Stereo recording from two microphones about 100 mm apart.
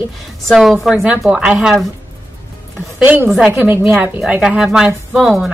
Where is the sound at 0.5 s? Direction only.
5° right (ahead or behind).